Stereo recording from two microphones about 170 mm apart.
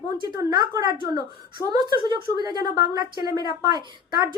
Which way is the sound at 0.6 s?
25° right (ahead or behind).